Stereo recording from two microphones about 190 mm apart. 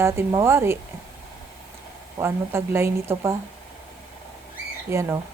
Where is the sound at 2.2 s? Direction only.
15° right (ahead or behind).